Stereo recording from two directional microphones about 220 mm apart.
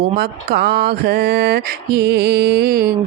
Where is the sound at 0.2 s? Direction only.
45° right (ahead or behind).